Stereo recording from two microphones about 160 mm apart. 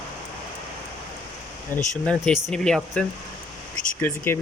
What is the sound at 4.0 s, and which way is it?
Speech, 15° left (ahead or behind).